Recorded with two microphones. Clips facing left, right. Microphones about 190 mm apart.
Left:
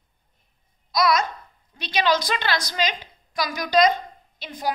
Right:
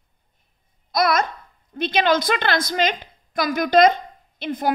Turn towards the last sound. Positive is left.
turn(degrees=-55)  # may be behind; listen again after turning